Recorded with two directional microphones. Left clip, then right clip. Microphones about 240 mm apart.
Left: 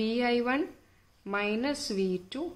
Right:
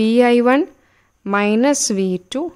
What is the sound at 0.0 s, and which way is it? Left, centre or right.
A woman's voice, right.